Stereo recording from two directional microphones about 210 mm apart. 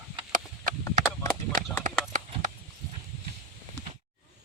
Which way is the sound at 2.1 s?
35° right (ahead or behind).